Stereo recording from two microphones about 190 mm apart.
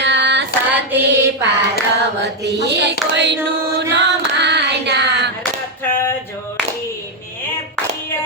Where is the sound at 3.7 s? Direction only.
65° right (ahead or behind).